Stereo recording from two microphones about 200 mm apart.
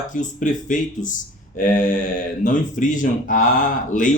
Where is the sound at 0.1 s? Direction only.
40° left (ahead or behind).